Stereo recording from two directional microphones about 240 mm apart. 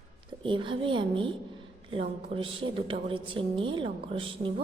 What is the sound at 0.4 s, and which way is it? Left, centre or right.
A woman's voice, right.